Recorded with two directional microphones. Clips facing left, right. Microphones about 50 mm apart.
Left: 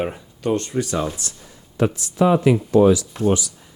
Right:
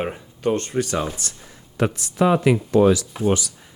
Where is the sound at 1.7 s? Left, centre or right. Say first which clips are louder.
Left 2 dB; right.